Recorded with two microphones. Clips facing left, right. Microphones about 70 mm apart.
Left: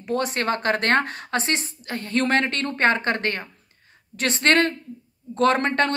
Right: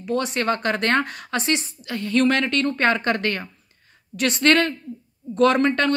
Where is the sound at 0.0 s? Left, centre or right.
Left.